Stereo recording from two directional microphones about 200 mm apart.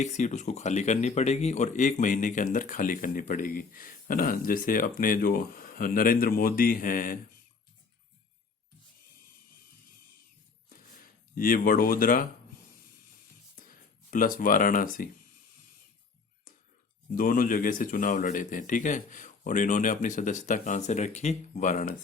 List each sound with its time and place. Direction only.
0.0 s speech: 35° left (ahead or behind)
11.3 s speech: 45° left (ahead or behind)
14.1 s speech: 45° left (ahead or behind)
17.2 s speech: 45° left (ahead or behind)